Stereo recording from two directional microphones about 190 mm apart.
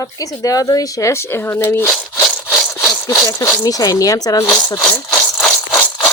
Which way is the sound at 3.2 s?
20° left (ahead or behind).